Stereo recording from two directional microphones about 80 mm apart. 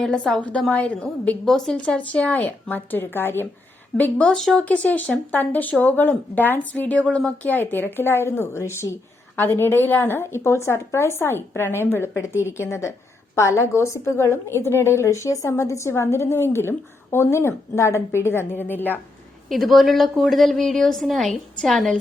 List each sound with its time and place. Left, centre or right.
0.0 s speech: centre
1.5 s speech: centre; by 3.4 s left
3.9 s speech: centre
4.6 s a woman's voice: centre
19.5 s a woman's voice: centre